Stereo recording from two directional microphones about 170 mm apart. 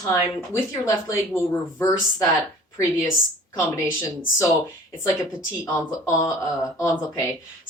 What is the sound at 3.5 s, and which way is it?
Speech, 15° left (ahead or behind).